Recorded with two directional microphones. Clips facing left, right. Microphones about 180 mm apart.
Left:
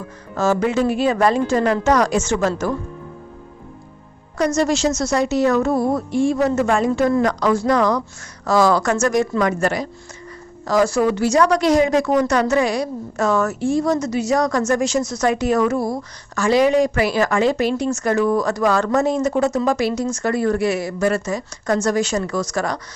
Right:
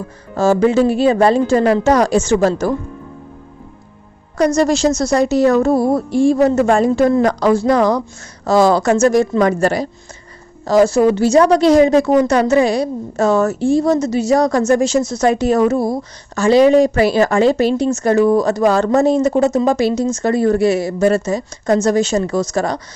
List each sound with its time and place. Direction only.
0.3 s a woman's voice: 30° right (ahead or behind)
4.4 s a woman's voice: 35° right (ahead or behind)